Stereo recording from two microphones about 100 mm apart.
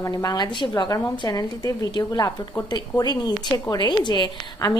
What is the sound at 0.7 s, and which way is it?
A woman's voice, 35° left (ahead or behind).